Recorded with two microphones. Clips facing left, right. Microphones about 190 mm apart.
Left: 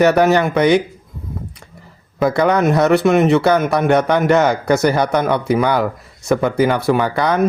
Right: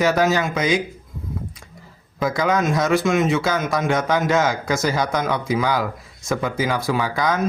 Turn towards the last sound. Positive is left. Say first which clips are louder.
# left 5 dB
turn(degrees=60)  # may be behind; listen again after turning